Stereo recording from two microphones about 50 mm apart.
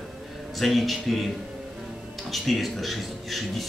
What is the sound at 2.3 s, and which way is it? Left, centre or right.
Speech, centre.